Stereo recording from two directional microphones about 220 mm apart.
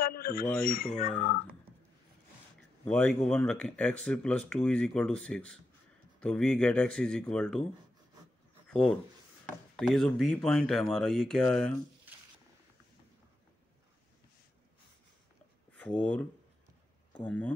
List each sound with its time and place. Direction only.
0.0 s speech: 40° left (ahead or behind)
2.8 s speech: 5° left (ahead or behind)
8.6 s a sound: 5° left (ahead or behind)
9.8 s speech: centre (ahead or behind)
15.7 s speech: 5° left (ahead or behind)